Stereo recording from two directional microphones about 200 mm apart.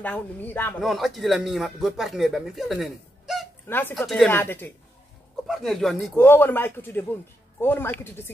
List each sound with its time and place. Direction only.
0.0 s a man's voice: 10° left (ahead or behind)
0.7 s speech: centre (ahead or behind)
3.6 s a man's voice: 10° left (ahead or behind)